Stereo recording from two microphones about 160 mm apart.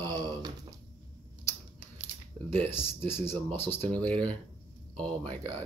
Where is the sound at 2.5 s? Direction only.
15° left (ahead or behind).